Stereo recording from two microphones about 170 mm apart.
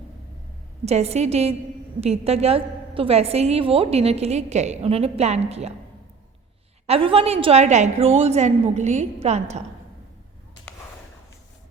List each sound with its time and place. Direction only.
0.9 s a woman's voice: 40° right (ahead or behind)
6.8 s a woman's voice: 35° right (ahead or behind)